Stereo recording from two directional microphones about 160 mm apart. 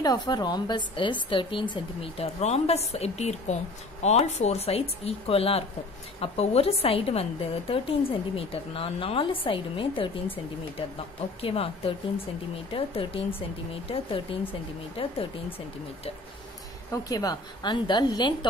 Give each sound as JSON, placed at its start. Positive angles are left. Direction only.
{"t": 0.0, "sound": "a woman's voice", "side_deg": 25}
{"t": 11.4, "sound": "a woman's voice", "side_deg": 35}
{"t": 16.9, "sound": "a woman's voice", "side_deg": 25}